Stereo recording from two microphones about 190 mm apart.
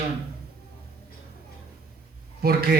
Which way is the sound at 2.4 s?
55° right (ahead or behind).